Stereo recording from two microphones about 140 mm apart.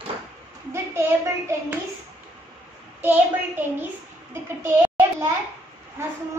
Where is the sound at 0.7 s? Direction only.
20° right (ahead or behind).